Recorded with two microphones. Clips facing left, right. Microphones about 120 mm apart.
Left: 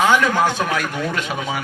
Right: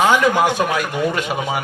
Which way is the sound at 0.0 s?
15° right (ahead or behind).